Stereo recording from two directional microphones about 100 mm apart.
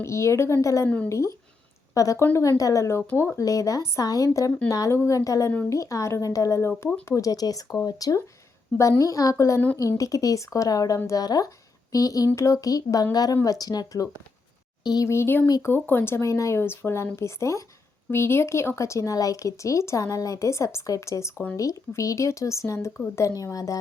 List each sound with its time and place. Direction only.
0.0 s speech: 30° left (ahead or behind)
0.9 s speech: 15° left (ahead or behind)
1.9 s a woman's voice: 30° left (ahead or behind)
3.1 s speech: 20° left (ahead or behind)
3.3 s speech: 35° left (ahead or behind)
15.0 s speech: 25° left (ahead or behind)